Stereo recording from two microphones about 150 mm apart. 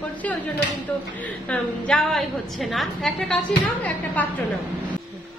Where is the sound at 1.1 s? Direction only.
10° left (ahead or behind).